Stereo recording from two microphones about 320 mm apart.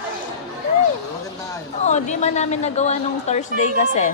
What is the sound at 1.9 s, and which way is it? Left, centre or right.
A woman's voice, left.